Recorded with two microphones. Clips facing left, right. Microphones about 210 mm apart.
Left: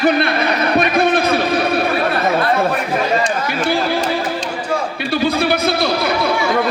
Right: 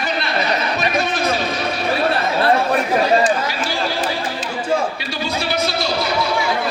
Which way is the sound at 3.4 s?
55° left (ahead or behind).